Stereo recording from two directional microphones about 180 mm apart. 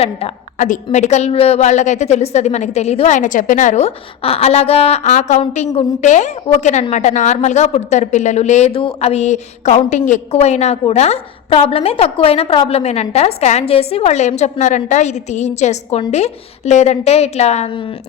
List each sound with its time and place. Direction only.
0.0 s a woman's voice: 40° left (ahead or behind)